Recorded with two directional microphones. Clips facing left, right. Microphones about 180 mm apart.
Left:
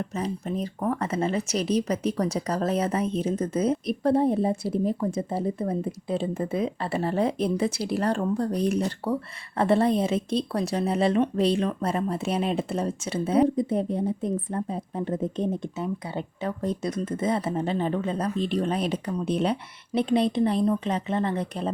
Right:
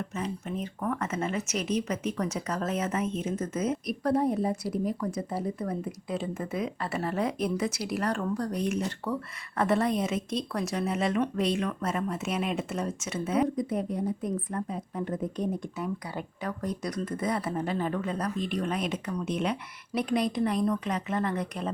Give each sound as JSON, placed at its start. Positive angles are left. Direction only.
{"t": 0.1, "sound": "speech", "side_deg": 35}